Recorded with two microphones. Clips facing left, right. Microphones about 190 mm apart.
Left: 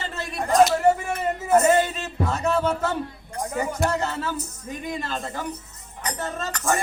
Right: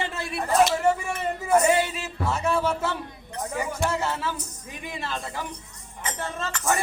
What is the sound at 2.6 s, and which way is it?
Speech, 45° left (ahead or behind).